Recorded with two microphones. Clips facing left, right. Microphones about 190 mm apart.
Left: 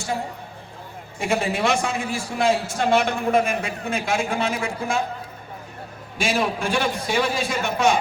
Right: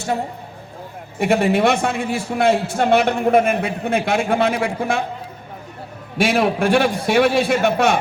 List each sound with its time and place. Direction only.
1.2 s a man's voice: 60° right (ahead or behind)
6.1 s a man's voice: 60° right (ahead or behind)